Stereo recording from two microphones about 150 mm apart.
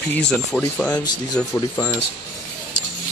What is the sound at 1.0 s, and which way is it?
Speech, 25° left (ahead or behind).